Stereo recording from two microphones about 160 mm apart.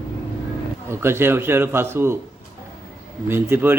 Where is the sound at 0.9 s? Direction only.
15° right (ahead or behind).